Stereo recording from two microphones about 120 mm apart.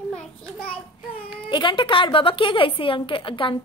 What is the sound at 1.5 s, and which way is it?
A woman's voice, 40° left (ahead or behind).